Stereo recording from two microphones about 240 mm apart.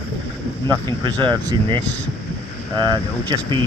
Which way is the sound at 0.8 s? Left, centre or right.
Centre.